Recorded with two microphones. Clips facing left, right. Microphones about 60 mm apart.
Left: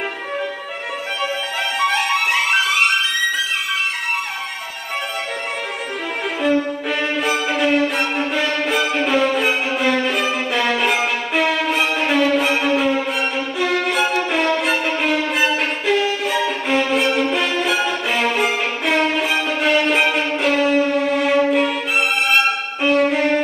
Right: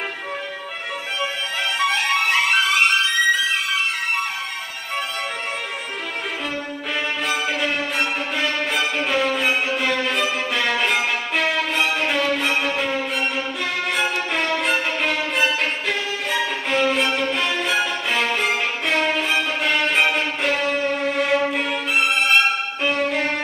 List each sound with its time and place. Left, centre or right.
7.2 s violin: centre
16.4 s violin: centre